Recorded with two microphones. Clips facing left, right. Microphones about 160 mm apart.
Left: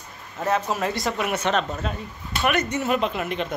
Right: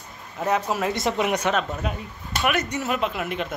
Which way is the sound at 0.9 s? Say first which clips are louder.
Right 2 dB; 20° right (ahead or behind).